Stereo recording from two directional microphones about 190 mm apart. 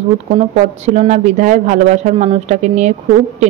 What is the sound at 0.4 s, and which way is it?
A woman's voice, 35° right (ahead or behind).